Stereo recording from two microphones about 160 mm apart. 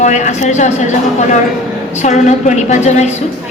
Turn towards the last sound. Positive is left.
turn(degrees=45)  # may be behind; listen again after turning